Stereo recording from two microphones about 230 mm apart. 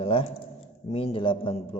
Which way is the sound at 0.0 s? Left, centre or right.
Left.